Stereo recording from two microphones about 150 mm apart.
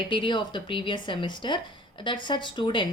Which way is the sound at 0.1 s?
35° left (ahead or behind).